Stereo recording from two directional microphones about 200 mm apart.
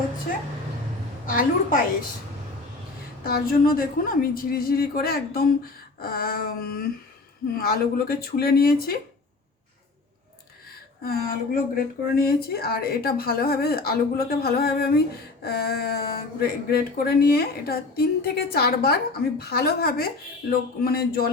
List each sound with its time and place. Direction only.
1.3 s speech: 45° left (ahead or behind)
3.2 s speech: 45° left (ahead or behind)
11.0 s speech: 45° left (ahead or behind)